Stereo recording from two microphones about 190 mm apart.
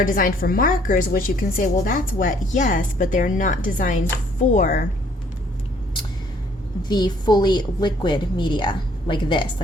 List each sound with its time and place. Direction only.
0.0 s a woman's voice: 45° left (ahead or behind)
6.8 s a woman's voice: 20° left (ahead or behind)